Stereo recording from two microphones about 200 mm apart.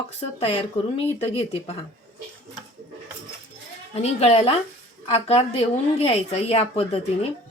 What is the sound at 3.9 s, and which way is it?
A woman's voice, 30° left (ahead or behind).